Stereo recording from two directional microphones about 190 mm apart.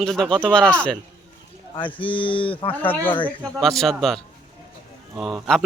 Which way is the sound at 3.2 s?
Centre (ahead or behind).